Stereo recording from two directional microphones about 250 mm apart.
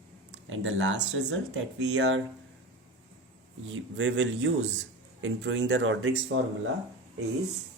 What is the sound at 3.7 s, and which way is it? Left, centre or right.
Speech, right.